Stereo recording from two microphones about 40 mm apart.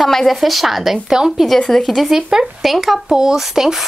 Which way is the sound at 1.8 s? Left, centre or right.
Centre.